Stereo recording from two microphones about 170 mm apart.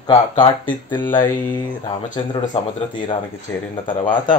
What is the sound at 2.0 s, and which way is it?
Speech, 50° left (ahead or behind).